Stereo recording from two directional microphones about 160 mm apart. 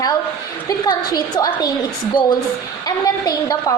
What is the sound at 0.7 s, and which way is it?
A woman's voice, 25° left (ahead or behind).